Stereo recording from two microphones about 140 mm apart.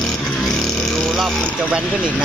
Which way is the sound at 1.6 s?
10° right (ahead or behind).